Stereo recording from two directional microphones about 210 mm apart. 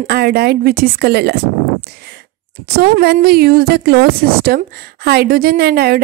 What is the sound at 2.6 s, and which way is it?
Speech, 50° right (ahead or behind).